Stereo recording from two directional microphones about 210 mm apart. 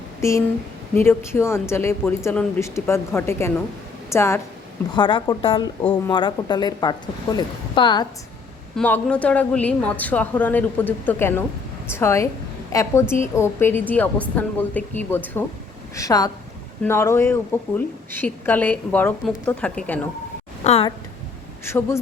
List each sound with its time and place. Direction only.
0.2 s speech: 15° left (ahead or behind)
8.7 s speech: 5° left (ahead or behind)
20.7 s speech: 25° left (ahead or behind)
21.6 s speech: 10° left (ahead or behind)